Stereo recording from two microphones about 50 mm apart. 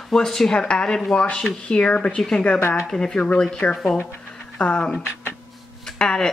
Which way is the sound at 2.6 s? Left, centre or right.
Left.